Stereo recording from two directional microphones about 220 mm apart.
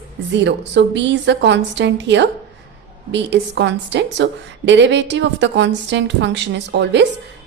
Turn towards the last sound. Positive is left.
turn(degrees=-50)  # may be behind; listen again after turning